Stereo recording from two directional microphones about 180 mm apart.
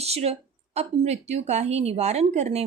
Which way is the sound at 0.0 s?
35° right (ahead or behind).